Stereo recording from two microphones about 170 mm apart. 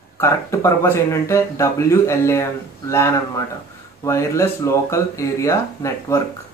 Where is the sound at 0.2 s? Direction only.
15° left (ahead or behind).